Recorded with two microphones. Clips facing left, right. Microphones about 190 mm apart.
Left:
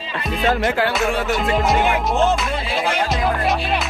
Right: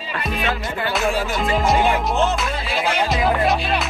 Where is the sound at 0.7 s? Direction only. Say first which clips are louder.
Left 6 dB; 90° left.